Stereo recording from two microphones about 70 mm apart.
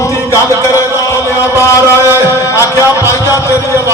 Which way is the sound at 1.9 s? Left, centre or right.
Left.